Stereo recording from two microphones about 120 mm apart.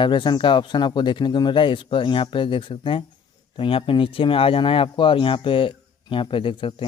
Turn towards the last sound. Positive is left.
turn(degrees=45)  # may be behind; listen again after turning